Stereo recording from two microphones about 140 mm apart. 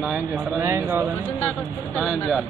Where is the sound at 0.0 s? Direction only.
5° right (ahead or behind).